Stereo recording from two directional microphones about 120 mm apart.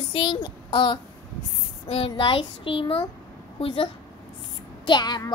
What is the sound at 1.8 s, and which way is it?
A woman's voice, 55° left (ahead or behind).